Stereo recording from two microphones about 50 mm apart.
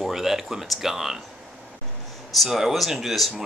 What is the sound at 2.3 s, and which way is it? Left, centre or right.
Speech, centre.